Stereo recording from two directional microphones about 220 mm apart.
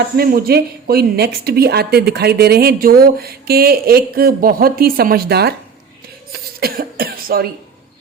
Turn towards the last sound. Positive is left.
turn(degrees=-40)  # may be behind; listen again after turning